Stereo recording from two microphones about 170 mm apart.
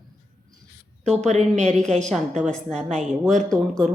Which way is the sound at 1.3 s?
45° right (ahead or behind).